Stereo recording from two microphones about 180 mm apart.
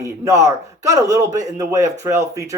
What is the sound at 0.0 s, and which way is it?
A man's voice, 15° right (ahead or behind).